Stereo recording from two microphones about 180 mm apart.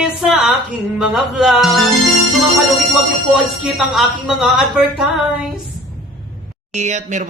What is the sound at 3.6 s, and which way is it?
A woman's voice, centre (ahead or behind).